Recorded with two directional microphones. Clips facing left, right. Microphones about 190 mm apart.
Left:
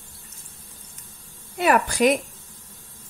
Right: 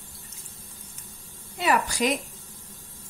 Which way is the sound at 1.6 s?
55° left (ahead or behind).